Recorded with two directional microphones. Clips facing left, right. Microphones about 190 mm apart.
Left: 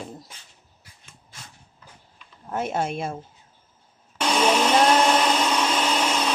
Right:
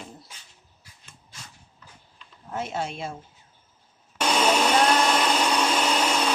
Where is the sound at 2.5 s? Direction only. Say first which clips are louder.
Left 4 dB; 55° left (ahead or behind).